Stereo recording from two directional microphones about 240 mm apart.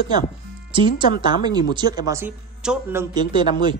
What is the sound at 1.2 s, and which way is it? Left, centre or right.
Speech, centre.